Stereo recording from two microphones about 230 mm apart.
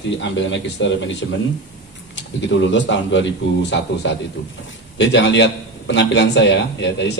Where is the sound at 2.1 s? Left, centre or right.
Left.